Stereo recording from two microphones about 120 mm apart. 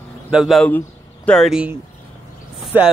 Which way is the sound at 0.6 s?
15° left (ahead or behind).